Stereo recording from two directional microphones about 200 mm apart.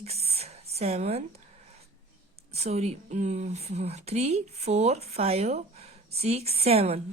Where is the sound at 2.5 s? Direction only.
30° right (ahead or behind).